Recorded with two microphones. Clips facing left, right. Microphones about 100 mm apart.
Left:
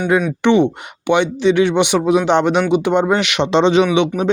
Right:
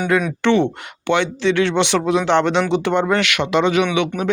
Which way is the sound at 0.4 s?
15° left (ahead or behind).